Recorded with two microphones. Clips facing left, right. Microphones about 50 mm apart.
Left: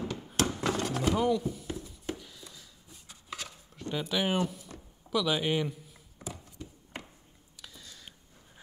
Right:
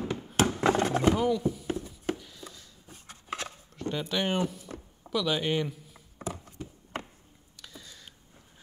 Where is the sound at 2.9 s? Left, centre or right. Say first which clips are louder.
Right 6 dB; right.